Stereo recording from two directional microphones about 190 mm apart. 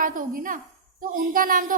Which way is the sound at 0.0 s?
45° right (ahead or behind).